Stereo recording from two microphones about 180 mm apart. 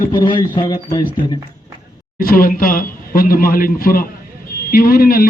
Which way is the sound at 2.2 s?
50° left (ahead or behind).